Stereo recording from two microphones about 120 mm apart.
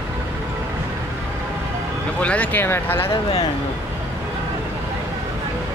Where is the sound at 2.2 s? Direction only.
10° left (ahead or behind).